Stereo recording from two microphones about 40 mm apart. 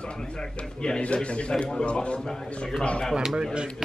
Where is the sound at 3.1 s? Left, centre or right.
Centre.